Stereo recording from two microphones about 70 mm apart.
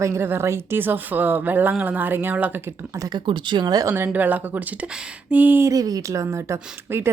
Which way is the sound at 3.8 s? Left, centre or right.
Right.